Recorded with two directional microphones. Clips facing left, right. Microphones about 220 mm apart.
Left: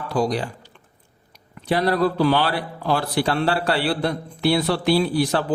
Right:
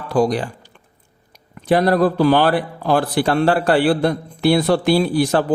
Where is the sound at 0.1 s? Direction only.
50° right (ahead or behind).